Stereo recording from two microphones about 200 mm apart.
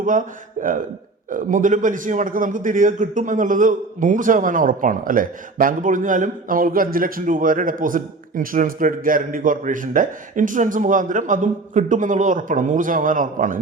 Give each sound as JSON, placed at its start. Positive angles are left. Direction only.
{"t": 0.0, "sound": "a man's voice", "side_deg": -40}